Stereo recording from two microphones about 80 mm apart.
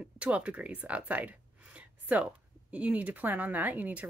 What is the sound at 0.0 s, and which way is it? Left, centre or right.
Speech, centre.